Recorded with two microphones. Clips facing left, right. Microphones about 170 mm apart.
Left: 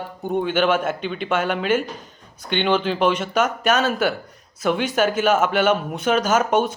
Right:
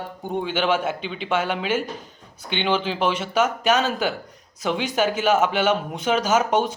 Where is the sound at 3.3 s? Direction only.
10° right (ahead or behind).